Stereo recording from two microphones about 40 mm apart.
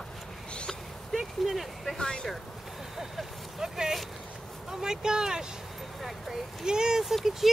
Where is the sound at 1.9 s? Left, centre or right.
Centre.